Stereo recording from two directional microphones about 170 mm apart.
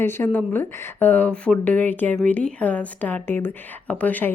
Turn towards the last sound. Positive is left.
turn(degrees=10)  # may be behind; listen again after turning